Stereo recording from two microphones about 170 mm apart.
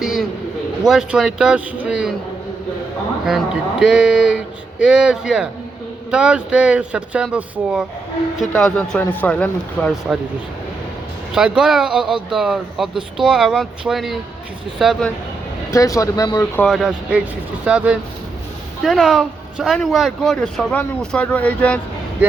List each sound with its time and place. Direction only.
0.0 s a sound: 5° right (ahead or behind)
0.9 s speech: 5° right (ahead or behind)
3.2 s speech: 5° right (ahead or behind)
8.4 s speech: 5° left (ahead or behind)
11.3 s speech: 5° right (ahead or behind)
15.7 s speech: 20° left (ahead or behind)
16.6 s speech: centre (ahead or behind)